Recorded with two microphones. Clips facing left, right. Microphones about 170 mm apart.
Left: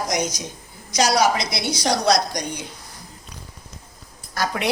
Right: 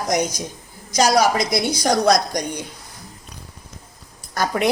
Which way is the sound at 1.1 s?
50° right (ahead or behind).